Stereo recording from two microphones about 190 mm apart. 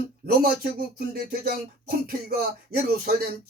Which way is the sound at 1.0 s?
50° right (ahead or behind).